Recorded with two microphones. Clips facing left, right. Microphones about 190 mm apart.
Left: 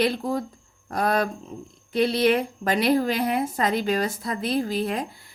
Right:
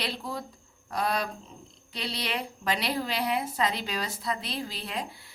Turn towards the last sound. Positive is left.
turn(degrees=45)  # may be behind; listen again after turning